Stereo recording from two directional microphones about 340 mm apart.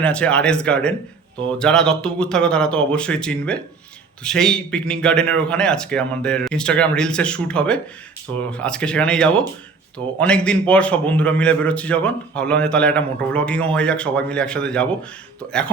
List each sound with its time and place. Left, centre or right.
0.0 s a man's voice: centre